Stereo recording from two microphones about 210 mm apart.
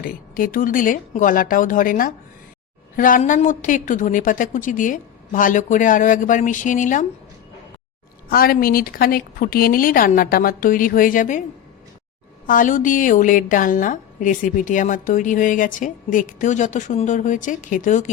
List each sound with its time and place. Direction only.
0.0 s a woman's voice: 40° left (ahead or behind)
8.3 s a woman's voice: 45° left (ahead or behind)
12.5 s a woman's voice: 40° left (ahead or behind)